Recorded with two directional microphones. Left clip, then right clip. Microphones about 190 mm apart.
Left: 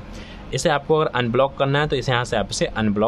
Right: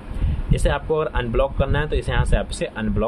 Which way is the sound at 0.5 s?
20° left (ahead or behind).